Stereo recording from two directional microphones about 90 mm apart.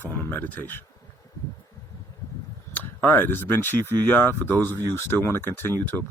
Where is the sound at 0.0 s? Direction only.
20° left (ahead or behind).